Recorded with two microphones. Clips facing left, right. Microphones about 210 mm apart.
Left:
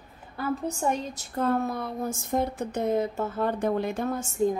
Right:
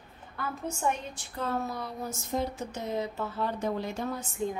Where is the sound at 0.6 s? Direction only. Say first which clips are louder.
Left 4 dB; 35° left (ahead or behind).